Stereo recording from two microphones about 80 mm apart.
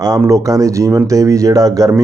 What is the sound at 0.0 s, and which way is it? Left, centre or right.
Speech, right.